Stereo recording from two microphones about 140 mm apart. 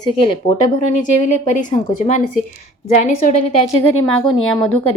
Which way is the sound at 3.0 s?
60° left (ahead or behind).